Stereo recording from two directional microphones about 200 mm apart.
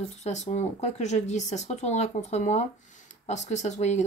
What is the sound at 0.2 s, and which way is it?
Speech, 35° left (ahead or behind).